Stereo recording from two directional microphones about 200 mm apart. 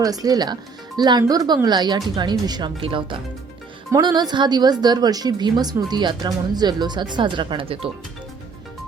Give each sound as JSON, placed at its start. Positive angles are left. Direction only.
{"t": 0.0, "sound": "a woman's voice", "side_deg": -20}